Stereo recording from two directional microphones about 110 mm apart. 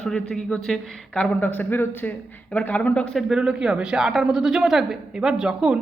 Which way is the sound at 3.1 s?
5° right (ahead or behind).